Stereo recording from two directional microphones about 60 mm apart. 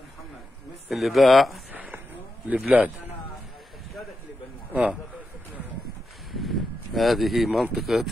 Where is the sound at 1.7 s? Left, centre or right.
Right.